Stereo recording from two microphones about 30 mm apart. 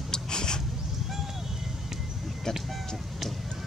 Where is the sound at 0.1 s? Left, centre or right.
Left.